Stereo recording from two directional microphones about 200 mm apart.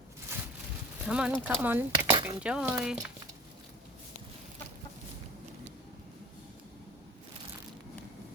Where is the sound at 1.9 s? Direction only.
25° right (ahead or behind).